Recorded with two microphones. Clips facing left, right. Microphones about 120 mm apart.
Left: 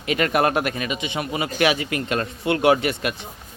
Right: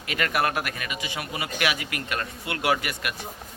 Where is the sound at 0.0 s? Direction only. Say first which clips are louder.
Left 6 dB; 25° left (ahead or behind).